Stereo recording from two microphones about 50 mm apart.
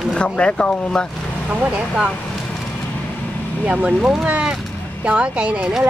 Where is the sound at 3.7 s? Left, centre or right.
Right.